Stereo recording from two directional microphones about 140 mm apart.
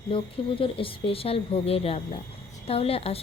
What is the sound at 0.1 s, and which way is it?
A woman's voice, 40° left (ahead or behind).